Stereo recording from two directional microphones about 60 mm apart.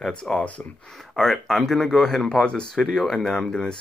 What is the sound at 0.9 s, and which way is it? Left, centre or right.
Speech, centre.